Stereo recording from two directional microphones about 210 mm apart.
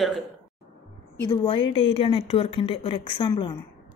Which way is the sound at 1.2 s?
25° left (ahead or behind).